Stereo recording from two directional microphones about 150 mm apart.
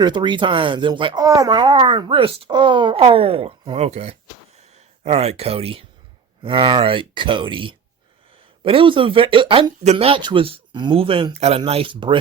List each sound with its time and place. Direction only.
0.0 s speech: 30° right (ahead or behind)